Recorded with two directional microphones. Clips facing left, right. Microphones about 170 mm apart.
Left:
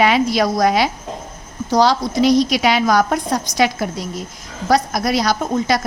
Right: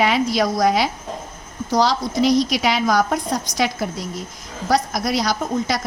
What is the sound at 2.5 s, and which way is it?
Speech, 75° left (ahead or behind).